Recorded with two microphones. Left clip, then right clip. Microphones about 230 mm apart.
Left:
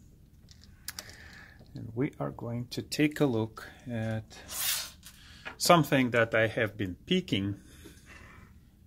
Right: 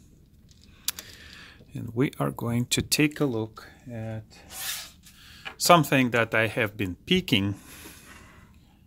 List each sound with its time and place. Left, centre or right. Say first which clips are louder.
0.8 s computer keyboard: right 8 dB; right
3.1 s speech: right 1 dB; centre
5.2 s speech: right 3 dB; centre; by 7.9 s right